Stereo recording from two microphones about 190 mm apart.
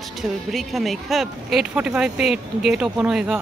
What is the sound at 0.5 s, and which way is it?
Speech, centre (ahead or behind).